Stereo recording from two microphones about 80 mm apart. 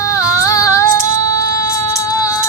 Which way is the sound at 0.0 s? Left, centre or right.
Left.